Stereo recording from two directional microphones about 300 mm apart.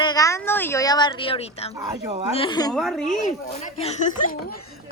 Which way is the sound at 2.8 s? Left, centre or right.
Centre.